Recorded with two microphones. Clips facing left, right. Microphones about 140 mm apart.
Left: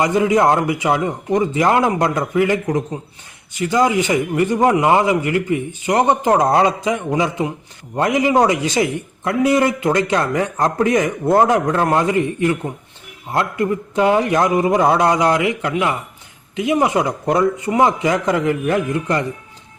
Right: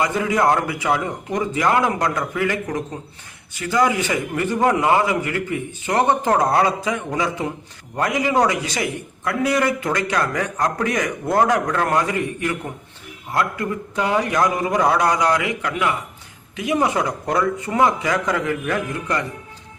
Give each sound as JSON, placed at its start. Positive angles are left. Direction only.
{"t": 0.0, "sound": "a man's voice", "side_deg": 20}